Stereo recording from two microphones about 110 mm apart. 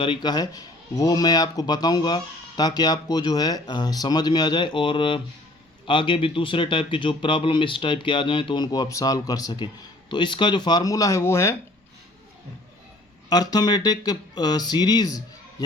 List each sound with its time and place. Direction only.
0.0 s speech: 45° left (ahead or behind); by 11.5 s 25° left (ahead or behind)
13.3 s speech: 40° left (ahead or behind)